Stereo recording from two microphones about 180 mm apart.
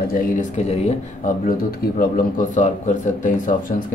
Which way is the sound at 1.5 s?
55° left (ahead or behind).